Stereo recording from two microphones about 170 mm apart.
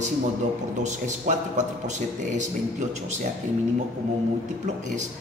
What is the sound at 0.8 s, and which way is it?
Speech, 45° right (ahead or behind).